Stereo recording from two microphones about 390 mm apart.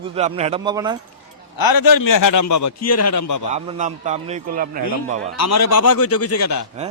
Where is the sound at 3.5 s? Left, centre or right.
Centre.